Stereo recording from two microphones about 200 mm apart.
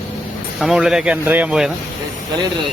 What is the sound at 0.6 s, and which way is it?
Speech, centre (ahead or behind).